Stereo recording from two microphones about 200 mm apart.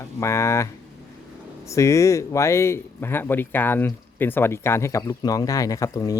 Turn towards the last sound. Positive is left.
turn(degrees=15)  # may be behind; listen again after turning